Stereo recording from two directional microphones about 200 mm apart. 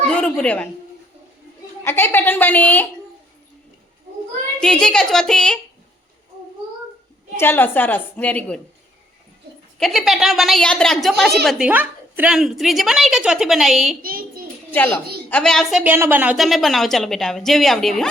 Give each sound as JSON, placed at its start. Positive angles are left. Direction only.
{"t": 0.1, "sound": "a woman's voice", "side_deg": 5}
{"t": 1.8, "sound": "a woman's voice", "side_deg": 10}
{"t": 4.6, "sound": "a woman's voice", "side_deg": 5}
{"t": 7.3, "sound": "a woman's voice", "side_deg": 10}
{"t": 9.7, "sound": "a woman's voice", "side_deg": 0}
{"t": 14.0, "sound": "child singing", "side_deg": -45}
{"t": 15.3, "sound": "a woman's voice", "side_deg": 5}